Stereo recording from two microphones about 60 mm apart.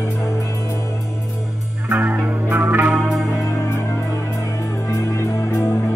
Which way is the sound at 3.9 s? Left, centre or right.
Left.